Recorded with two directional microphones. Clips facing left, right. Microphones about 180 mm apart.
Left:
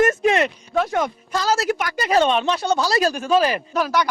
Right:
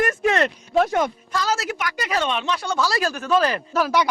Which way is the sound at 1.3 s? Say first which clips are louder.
Left 4 dB; 35° left (ahead or behind).